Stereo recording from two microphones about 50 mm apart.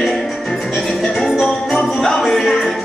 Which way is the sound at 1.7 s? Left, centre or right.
Centre.